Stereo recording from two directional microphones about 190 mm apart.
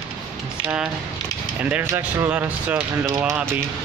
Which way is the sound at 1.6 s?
10° right (ahead or behind).